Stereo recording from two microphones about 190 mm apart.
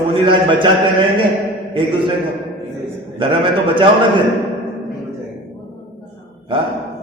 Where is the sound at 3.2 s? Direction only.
25° right (ahead or behind).